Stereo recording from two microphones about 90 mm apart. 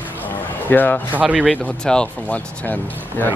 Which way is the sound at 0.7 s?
20° left (ahead or behind).